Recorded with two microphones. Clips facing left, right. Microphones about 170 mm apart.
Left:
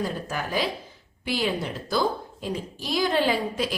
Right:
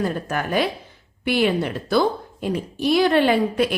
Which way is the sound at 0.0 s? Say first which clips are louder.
Right 5 dB; 60° right (ahead or behind).